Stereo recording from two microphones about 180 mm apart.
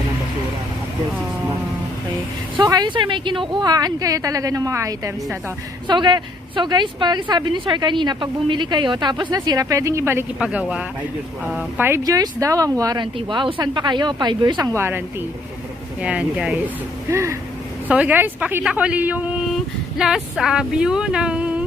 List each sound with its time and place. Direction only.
2.6 s a woman's voice: 25° right (ahead or behind); by 16.6 s 5° right (ahead or behind)
17.1 s speech: 15° right (ahead or behind)